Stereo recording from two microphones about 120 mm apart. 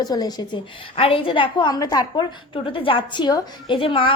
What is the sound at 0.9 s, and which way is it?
A woman's voice, 50° left (ahead or behind).